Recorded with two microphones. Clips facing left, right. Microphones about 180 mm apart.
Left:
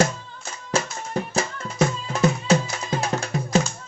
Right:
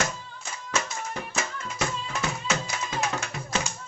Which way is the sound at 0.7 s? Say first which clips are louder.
Left 6 dB; 30° left (ahead or behind).